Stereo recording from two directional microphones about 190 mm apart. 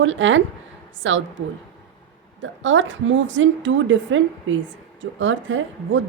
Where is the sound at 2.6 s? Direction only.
80° right.